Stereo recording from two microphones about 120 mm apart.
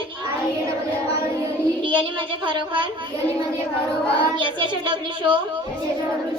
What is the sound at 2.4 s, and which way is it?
Speech, 40° right (ahead or behind).